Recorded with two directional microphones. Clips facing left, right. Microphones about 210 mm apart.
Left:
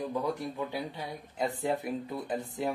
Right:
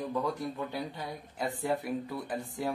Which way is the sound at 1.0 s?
20° left (ahead or behind).